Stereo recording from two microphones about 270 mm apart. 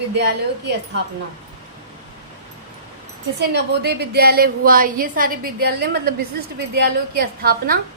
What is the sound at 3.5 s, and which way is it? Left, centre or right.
A woman's voice, right.